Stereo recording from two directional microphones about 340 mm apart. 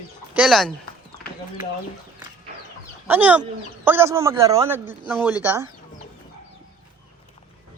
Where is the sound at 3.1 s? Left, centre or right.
Centre.